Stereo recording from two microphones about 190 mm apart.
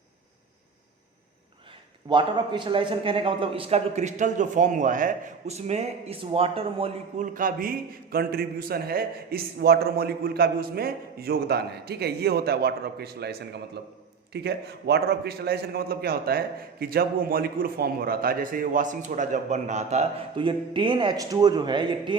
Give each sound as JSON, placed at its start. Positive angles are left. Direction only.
{"t": 2.0, "sound": "a man's voice", "side_deg": -25}
{"t": 7.3, "sound": "a man's voice", "side_deg": -45}